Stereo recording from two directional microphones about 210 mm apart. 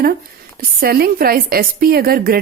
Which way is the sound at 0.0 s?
45° right (ahead or behind).